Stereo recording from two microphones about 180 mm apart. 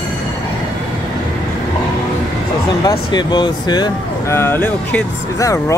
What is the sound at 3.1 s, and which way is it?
Speech, 25° left (ahead or behind).